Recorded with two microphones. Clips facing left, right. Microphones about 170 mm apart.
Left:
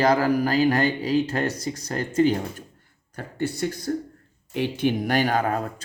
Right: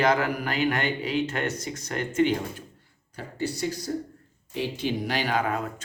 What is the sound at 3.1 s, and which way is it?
Speech, 55° left (ahead or behind).